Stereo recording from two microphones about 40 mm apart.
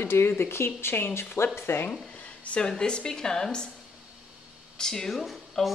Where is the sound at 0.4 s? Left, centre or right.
Left.